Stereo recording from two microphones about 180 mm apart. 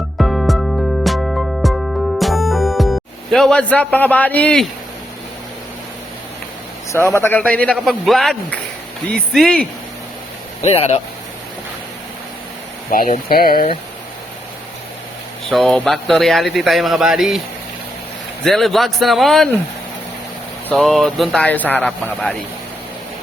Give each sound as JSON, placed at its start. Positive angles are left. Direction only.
{"t": 0.2, "sound": "music", "side_deg": 0}
{"t": 6.9, "sound": "a man's voice", "side_deg": 15}
{"t": 10.6, "sound": "speech", "side_deg": 35}
{"t": 12.9, "sound": "speech", "side_deg": 50}
{"t": 15.4, "sound": "speech", "side_deg": 0}
{"t": 18.4, "sound": "speech", "side_deg": 0}
{"t": 20.7, "sound": "speech", "side_deg": 0}